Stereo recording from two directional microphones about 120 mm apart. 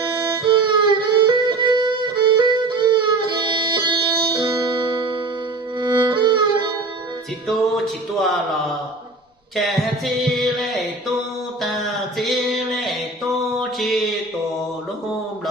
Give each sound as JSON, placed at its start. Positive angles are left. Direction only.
{"t": 0.4, "sound": "violin", "side_deg": -40}
{"t": 4.4, "sound": "music", "side_deg": -35}
{"t": 9.6, "sound": "music", "side_deg": 0}
{"t": 11.6, "sound": "a sound", "side_deg": 0}
{"t": 13.6, "sound": "mantra", "side_deg": 0}